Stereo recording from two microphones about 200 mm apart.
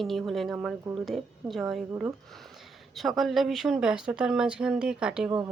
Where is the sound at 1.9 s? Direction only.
10° right (ahead or behind).